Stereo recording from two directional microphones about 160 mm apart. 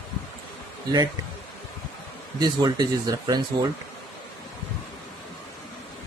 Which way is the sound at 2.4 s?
25° right (ahead or behind).